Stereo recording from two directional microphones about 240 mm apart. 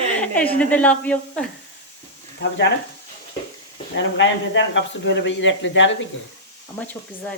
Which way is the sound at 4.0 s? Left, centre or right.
Left.